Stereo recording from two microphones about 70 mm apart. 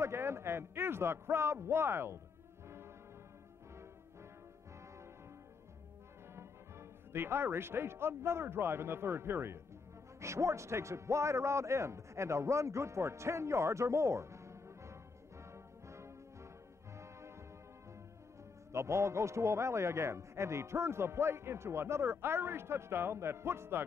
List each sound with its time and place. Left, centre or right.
0.0 s a man's voice: right
6.3 s a man's voice: right
15.5 s music: right
18.7 s a man's voice: right